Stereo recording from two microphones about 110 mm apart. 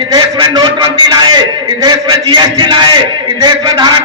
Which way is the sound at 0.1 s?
40° right (ahead or behind).